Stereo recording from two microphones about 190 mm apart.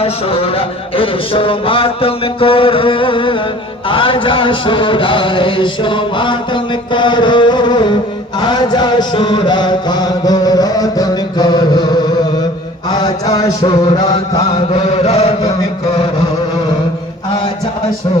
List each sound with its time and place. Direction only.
0.0 s a man's voice: 30° left (ahead or behind)
8.4 s a sound: 20° left (ahead or behind)
12.9 s a man's voice: 20° left (ahead or behind)
14.8 s chant: 30° left (ahead or behind)